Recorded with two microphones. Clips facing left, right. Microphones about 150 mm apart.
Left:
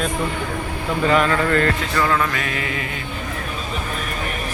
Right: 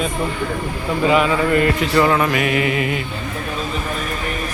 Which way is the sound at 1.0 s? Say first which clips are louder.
Right 2 dB; 10° right (ahead or behind).